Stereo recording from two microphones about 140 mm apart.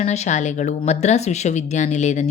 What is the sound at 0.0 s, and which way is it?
Speech, 55° left (ahead or behind).